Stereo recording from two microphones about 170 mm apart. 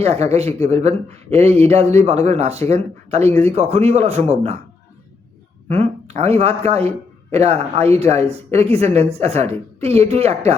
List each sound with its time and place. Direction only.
0.0 s speech: 40° right (ahead or behind)
5.6 s speech: 40° right (ahead or behind)